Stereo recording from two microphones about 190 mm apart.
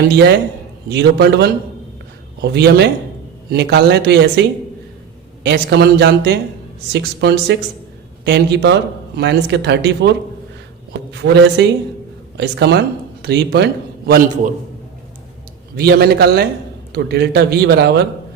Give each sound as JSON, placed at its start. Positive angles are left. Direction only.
{"t": 0.1, "sound": "a man's voice", "side_deg": -60}
{"t": 15.7, "sound": "a man's voice", "side_deg": -55}